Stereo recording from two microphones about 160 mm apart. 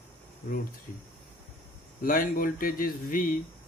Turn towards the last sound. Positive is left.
turn(degrees=60)  # may be behind; listen again after turning